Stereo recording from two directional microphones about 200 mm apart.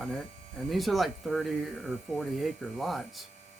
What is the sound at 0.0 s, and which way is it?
Speech, centre (ahead or behind).